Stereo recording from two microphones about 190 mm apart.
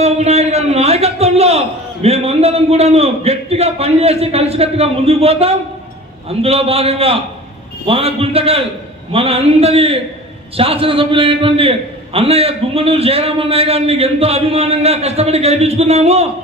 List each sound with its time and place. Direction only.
0.0 s a man's voice: 35° right (ahead or behind)